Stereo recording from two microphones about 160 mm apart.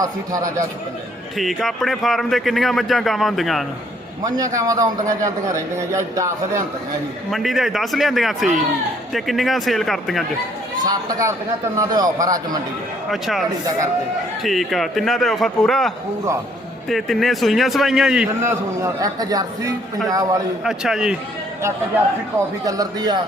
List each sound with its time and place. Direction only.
0.0 s a man's voice: 20° right (ahead or behind)
1.4 s speech: centre (ahead or behind)
4.2 s a man's voice: 20° right (ahead or behind)
7.3 s speech: centre (ahead or behind)
10.8 s a man's voice: 20° right (ahead or behind)
13.1 s speech: centre (ahead or behind)
14.4 s speech: centre (ahead or behind)
16.9 s speech: centre (ahead or behind)
18.4 s a man's voice: 20° right (ahead or behind)
20.7 s speech: 5° right (ahead or behind)
22.6 s a man's voice: 25° right (ahead or behind)